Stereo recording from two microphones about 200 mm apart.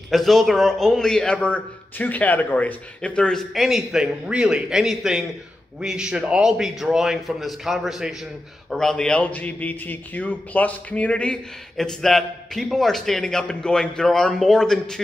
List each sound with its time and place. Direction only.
0.1 s a man's voice: centre (ahead or behind)